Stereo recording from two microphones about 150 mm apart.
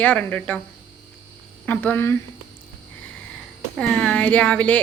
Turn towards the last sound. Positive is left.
turn(degrees=10)  # may be behind; listen again after turning